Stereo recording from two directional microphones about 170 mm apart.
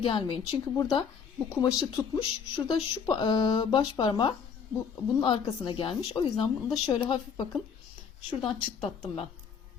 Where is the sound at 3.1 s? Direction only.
25° left (ahead or behind).